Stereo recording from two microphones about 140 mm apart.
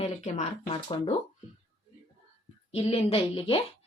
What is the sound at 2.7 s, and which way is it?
Speech, 45° left (ahead or behind).